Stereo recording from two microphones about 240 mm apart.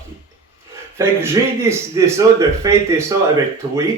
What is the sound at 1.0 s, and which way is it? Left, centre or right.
A man's voice, centre.